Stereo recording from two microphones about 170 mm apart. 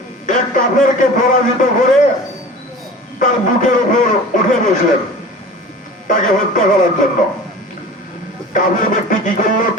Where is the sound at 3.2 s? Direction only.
50° left (ahead or behind).